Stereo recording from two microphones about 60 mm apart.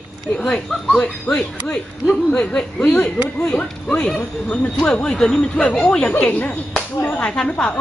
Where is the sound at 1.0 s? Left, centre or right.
Centre.